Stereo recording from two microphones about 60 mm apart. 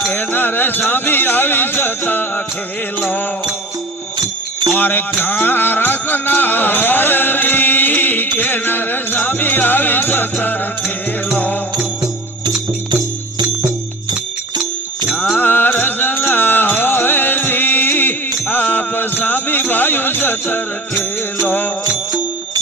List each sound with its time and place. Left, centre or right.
0.1 s music: left
4.8 s music: left
15.4 s music: left